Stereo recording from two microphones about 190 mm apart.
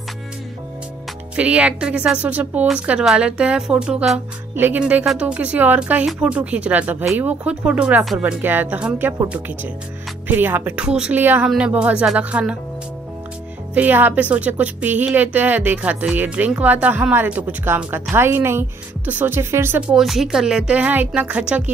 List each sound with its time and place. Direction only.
1.3 s a woman's voice: 5° right (ahead or behind)
13.7 s speech: 10° right (ahead or behind)